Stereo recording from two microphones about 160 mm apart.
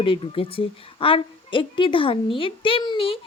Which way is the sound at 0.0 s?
35° left (ahead or behind).